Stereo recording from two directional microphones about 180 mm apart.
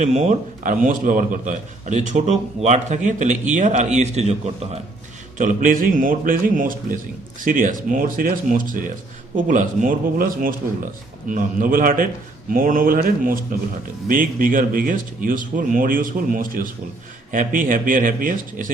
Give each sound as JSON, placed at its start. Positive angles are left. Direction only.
{"t": 0.0, "sound": "a man's voice", "side_deg": -40}